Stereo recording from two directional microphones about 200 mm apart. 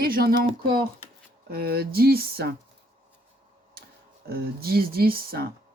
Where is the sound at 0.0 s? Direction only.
50° right (ahead or behind).